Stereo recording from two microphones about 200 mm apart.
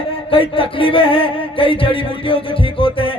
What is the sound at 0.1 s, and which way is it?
Music, 25° left (ahead or behind).